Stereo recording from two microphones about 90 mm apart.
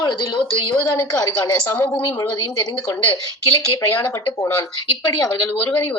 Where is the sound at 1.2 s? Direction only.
35° left (ahead or behind).